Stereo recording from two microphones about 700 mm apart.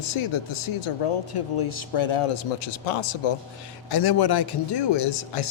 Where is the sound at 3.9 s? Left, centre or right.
Left.